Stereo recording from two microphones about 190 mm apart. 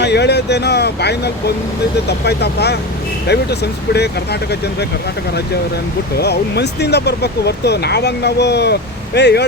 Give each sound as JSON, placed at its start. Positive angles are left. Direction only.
{"t": 0.0, "sound": "speech", "side_deg": 60}
{"t": 6.1, "sound": "speech", "side_deg": 60}